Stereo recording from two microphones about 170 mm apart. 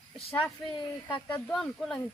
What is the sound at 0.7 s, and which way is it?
Speech, 25° left (ahead or behind).